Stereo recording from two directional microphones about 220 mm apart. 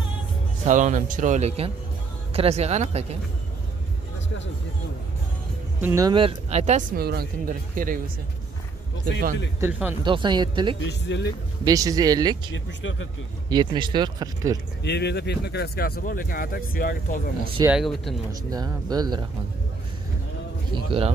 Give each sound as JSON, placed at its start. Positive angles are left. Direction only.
{"t": 0.7, "sound": "speech", "side_deg": -35}
{"t": 5.8, "sound": "speech", "side_deg": -15}
{"t": 7.0, "sound": "speech", "side_deg": -45}
{"t": 9.6, "sound": "speech", "side_deg": -5}
{"t": 10.0, "sound": "speech", "side_deg": -20}
{"t": 10.8, "sound": "speech", "side_deg": 50}
{"t": 11.6, "sound": "speech", "side_deg": -15}
{"t": 12.5, "sound": "speech", "side_deg": 60}
{"t": 13.5, "sound": "speech", "side_deg": -20}
{"t": 14.8, "sound": "speech", "side_deg": 50}
{"t": 17.6, "sound": "speech", "side_deg": 0}
{"t": 18.3, "sound": "speech", "side_deg": -15}
{"t": 20.7, "sound": "speech", "side_deg": -25}